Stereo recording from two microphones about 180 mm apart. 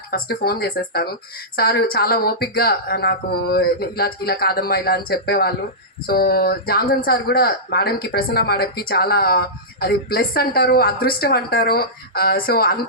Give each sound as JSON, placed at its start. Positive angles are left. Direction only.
{"t": 0.1, "sound": "speech", "side_deg": 55}